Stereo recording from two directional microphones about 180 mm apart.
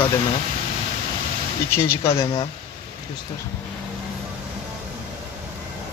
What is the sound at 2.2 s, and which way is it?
Speech, 25° left (ahead or behind).